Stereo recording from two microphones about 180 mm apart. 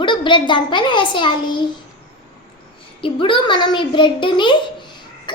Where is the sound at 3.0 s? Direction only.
30° left (ahead or behind).